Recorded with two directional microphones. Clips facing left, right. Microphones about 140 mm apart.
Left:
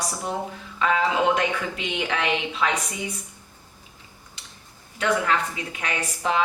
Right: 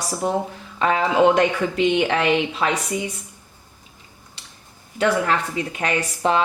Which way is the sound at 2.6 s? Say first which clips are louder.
Left 1 dB; 35° right (ahead or behind).